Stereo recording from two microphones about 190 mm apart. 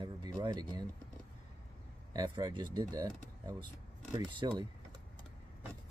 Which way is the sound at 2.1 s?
20° right (ahead or behind).